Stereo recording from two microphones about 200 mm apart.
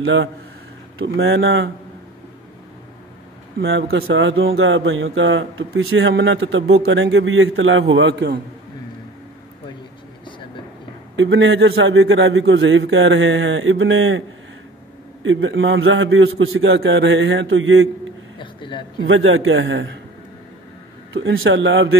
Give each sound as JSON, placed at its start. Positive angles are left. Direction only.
{"t": 0.0, "sound": "a man's voice", "side_deg": -65}
{"t": 0.9, "sound": "speech", "side_deg": -75}
{"t": 3.9, "sound": "speech", "side_deg": -70}
{"t": 7.9, "sound": "a man's voice", "side_deg": -65}
{"t": 11.1, "sound": "speech", "side_deg": -75}
{"t": 15.2, "sound": "speech", "side_deg": -75}
{"t": 18.4, "sound": "a sound", "side_deg": 25}
{"t": 19.0, "sound": "speech", "side_deg": -80}
{"t": 21.1, "sound": "speech", "side_deg": -75}